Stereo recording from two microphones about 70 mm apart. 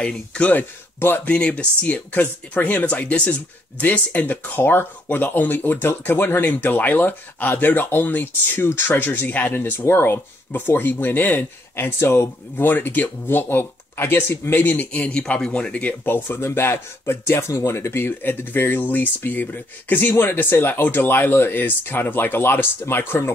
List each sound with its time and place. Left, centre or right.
0.0 s speech: centre; by 12.3 s left
12.5 s speech: left
16.3 s speech: left
17.3 s speech: left